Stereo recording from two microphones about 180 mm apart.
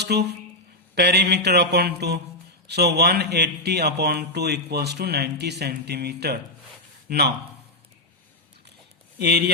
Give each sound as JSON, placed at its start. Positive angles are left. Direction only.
{"t": 0.0, "sound": "a woman's voice", "side_deg": -65}
{"t": 0.9, "sound": "a sound", "side_deg": -65}
{"t": 2.6, "sound": "speech", "side_deg": -65}
{"t": 9.1, "sound": "speech", "side_deg": -65}